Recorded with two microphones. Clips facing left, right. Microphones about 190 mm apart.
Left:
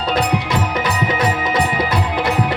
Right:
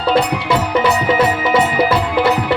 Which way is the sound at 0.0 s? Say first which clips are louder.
Right 3 dB; 30° right (ahead or behind).